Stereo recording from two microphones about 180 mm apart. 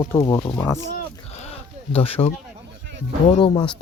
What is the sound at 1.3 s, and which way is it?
Sheep, 35° left (ahead or behind).